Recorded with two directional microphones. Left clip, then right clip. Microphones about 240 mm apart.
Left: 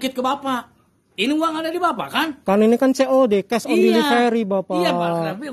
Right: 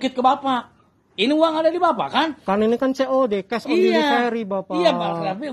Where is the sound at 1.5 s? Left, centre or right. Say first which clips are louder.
Right 3 dB; left.